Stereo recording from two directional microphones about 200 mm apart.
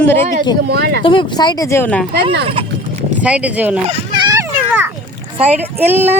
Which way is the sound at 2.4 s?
25° right (ahead or behind).